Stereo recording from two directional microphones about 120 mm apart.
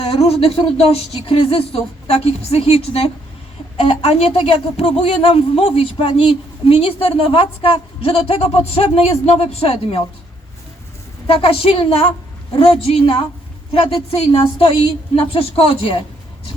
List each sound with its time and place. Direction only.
0.0 s speech: 55° left (ahead or behind)
11.3 s speech: 50° left (ahead or behind)